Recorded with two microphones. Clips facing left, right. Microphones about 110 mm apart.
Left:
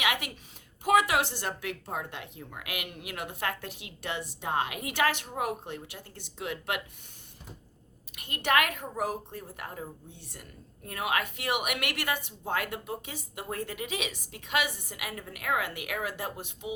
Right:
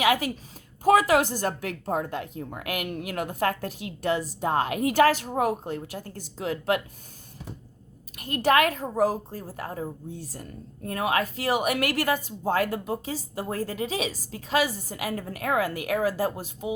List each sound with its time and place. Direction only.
0.0 s a sound: 35° right (ahead or behind)
0.9 s a woman's voice: 40° right (ahead or behind)
8.1 s a woman's voice: 35° right (ahead or behind)